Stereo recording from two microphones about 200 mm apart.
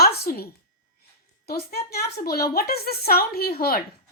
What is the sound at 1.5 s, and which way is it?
Speech, 50° left (ahead or behind).